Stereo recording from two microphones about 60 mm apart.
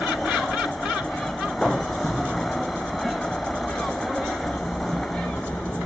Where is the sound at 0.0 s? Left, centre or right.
Centre.